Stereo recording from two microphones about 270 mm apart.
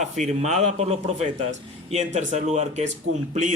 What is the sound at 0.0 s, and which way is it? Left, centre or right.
Speech, right.